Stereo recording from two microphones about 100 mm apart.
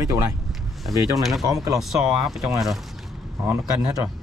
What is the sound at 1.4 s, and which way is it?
Speech, 35° right (ahead or behind).